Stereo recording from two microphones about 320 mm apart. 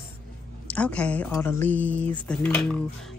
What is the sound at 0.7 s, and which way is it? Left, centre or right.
Speech, centre.